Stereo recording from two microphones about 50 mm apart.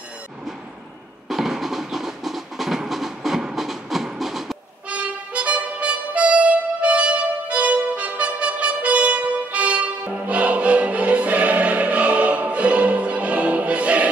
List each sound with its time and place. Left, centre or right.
1.3 s train: centre
4.8 s music: right